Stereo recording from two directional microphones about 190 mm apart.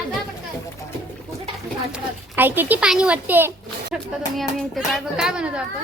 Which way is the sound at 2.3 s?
10° right (ahead or behind).